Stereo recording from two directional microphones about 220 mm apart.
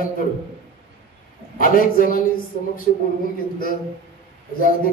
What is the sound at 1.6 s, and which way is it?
Speech, 40° left (ahead or behind).